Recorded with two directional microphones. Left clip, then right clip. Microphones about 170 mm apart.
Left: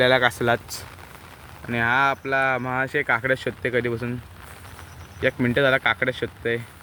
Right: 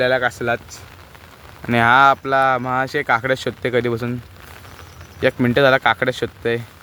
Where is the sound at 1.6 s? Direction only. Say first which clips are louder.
Right 8 dB; 60° right (ahead or behind); by 2.6 s 40° right (ahead or behind).